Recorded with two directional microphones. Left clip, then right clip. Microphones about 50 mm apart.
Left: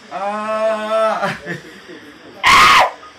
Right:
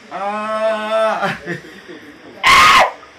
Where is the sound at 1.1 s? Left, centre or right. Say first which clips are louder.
Right 1 dB; left.